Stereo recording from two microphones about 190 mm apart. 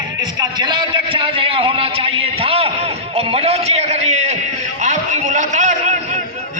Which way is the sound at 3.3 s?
35° right (ahead or behind).